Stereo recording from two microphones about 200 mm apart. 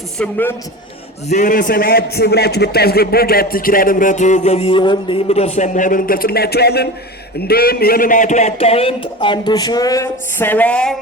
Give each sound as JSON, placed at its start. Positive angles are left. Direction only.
{"t": 0.2, "sound": "a man's voice", "side_deg": 10}
{"t": 1.3, "sound": "a man's voice", "side_deg": 40}